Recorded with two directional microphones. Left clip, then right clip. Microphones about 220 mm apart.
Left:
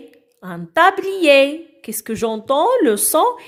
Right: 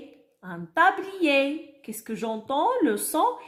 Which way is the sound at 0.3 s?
40° left (ahead or behind).